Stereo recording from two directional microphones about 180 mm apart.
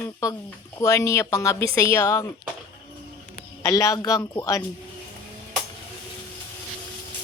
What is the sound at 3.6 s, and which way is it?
Speech, 20° left (ahead or behind).